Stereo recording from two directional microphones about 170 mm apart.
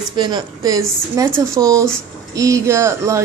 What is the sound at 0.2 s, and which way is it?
Speech, 25° right (ahead or behind).